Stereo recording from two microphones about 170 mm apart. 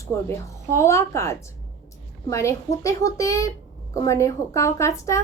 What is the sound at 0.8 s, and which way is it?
A woman's voice, 15° left (ahead or behind).